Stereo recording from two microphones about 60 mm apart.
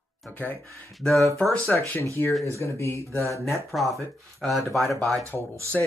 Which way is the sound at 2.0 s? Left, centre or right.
Left.